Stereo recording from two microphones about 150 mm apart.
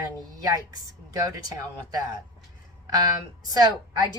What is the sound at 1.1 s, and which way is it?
Speech, 20° right (ahead or behind).